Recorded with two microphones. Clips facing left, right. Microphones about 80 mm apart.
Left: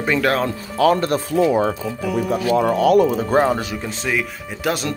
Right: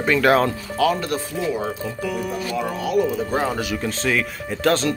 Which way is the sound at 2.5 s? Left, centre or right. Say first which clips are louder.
Left 8 dB; left.